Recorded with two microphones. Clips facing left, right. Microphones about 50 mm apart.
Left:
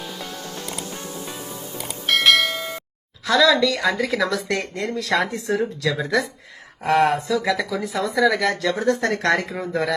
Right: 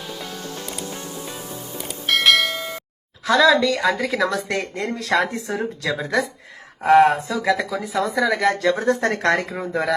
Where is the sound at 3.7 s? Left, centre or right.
Centre.